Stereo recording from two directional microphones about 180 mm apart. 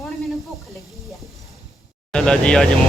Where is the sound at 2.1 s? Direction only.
5° left (ahead or behind).